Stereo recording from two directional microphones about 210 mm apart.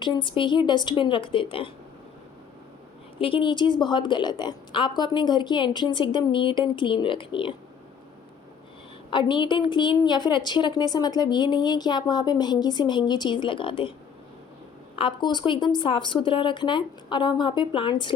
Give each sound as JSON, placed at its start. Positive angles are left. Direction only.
{"t": 0.0, "sound": "a woman's voice", "side_deg": 20}
{"t": 3.2, "sound": "a woman's voice", "side_deg": 25}
{"t": 9.0, "sound": "a woman's voice", "side_deg": 20}
{"t": 14.9, "sound": "a woman's voice", "side_deg": 25}